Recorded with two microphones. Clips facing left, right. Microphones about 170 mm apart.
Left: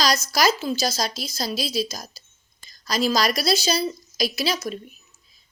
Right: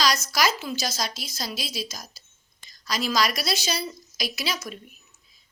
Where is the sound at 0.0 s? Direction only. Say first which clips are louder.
Left 3 dB; 35° left (ahead or behind).